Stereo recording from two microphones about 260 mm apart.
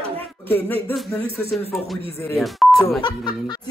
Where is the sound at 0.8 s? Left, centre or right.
Centre.